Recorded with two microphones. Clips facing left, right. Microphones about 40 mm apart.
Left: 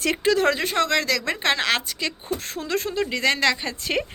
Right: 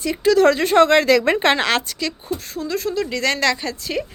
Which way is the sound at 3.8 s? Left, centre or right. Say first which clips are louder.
Even; left.